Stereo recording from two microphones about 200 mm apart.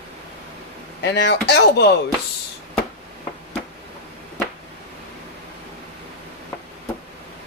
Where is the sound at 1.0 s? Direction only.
60° left (ahead or behind).